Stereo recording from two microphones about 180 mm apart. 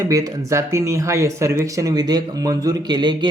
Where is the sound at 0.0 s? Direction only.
20° right (ahead or behind).